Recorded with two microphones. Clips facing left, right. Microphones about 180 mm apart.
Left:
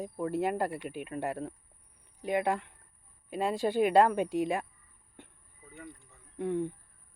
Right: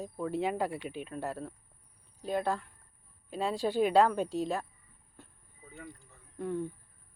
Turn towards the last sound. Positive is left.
turn(degrees=15)  # may be behind; listen again after turning